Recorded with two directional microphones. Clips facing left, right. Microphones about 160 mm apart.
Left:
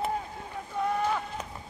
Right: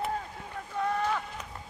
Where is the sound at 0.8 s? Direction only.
10° left (ahead or behind).